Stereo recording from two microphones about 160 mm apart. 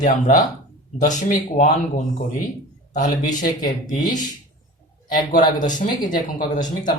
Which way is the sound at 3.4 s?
60° left (ahead or behind).